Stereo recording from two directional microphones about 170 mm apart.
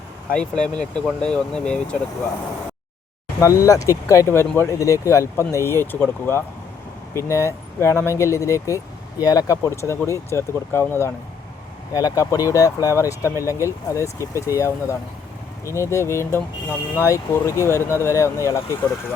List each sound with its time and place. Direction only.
0.3 s speech: 5° left (ahead or behind)
3.4 s speech: 20° left (ahead or behind)